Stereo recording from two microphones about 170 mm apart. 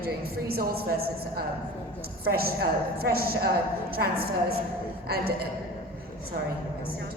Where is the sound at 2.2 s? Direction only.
60° right (ahead or behind).